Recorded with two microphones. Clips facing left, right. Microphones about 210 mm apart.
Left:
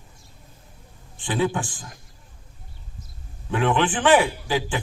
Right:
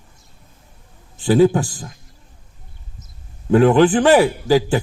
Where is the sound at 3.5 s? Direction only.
40° right (ahead or behind).